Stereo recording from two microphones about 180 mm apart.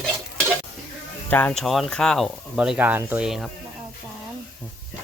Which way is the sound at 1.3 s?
10° left (ahead or behind).